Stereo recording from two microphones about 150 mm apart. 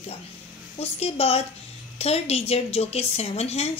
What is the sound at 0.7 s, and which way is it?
Speech, 45° left (ahead or behind).